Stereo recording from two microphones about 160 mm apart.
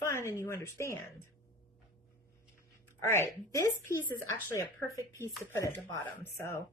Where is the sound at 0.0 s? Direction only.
15° left (ahead or behind).